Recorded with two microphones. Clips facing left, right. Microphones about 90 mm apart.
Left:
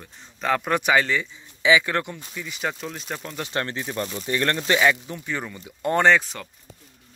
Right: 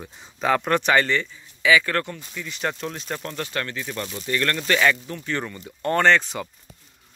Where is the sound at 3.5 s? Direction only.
30° left (ahead or behind); by 6.3 s 10° left (ahead or behind).